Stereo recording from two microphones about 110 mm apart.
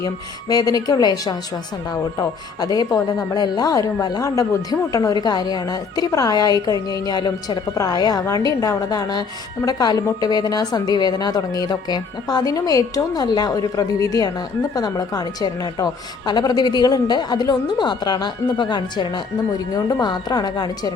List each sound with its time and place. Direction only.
0.0 s a woman's voice: 35° left (ahead or behind)